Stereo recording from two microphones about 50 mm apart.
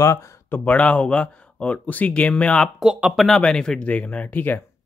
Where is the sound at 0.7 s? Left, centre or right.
Left.